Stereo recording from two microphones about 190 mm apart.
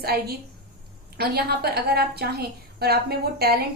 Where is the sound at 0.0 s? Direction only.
55° right (ahead or behind).